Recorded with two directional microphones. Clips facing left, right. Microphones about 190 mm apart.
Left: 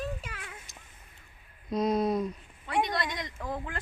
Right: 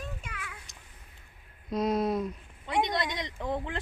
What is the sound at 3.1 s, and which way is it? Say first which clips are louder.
Speech: right 3 dB; 25° right (ahead or behind).